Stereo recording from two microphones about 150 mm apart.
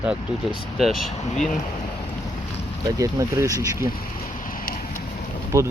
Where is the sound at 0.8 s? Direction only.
Centre (ahead or behind).